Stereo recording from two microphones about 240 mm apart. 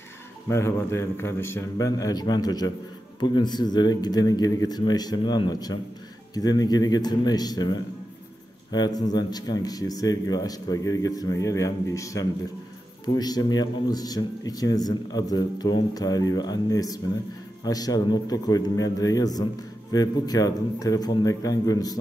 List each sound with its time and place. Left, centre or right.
0.5 s speech: centre